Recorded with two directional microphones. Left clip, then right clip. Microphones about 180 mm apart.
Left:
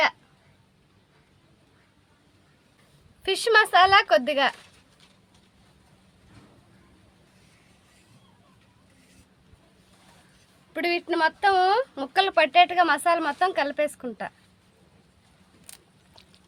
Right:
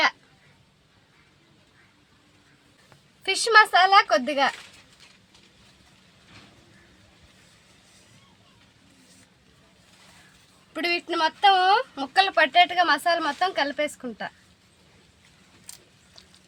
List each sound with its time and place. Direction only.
3.2 s speech: 20° left (ahead or behind)
10.8 s speech: 35° left (ahead or behind)